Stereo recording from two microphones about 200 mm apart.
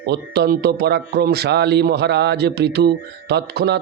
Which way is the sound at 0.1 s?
55° right (ahead or behind).